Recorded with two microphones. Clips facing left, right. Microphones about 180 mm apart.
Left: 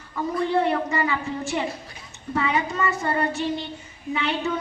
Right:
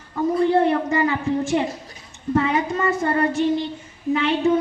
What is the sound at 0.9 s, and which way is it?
Child singing, 50° right (ahead or behind).